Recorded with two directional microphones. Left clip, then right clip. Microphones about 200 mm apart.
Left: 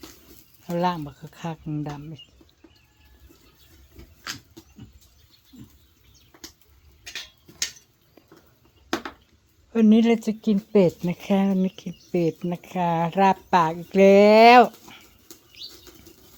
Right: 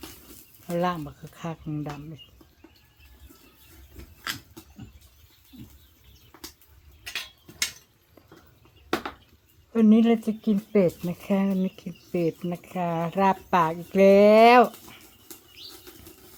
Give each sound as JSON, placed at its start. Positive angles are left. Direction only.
{"t": 0.7, "sound": "speech", "side_deg": 15}
{"t": 9.7, "sound": "speech", "side_deg": 15}